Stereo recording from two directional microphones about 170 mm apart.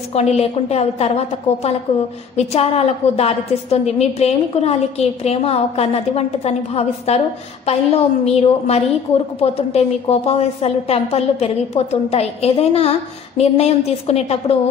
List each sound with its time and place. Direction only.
0.1 s a woman's voice: 40° left (ahead or behind)